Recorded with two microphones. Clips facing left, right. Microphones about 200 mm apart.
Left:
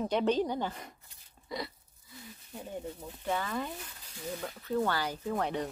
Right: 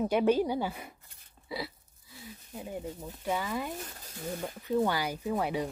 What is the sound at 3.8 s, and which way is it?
Speech, 45° right (ahead or behind).